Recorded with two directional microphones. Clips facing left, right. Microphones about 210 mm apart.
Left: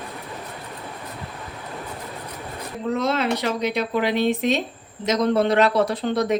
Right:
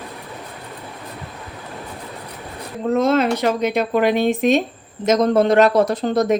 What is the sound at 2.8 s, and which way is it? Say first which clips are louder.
A woman's voice: right 6 dB; 45° right (ahead or behind).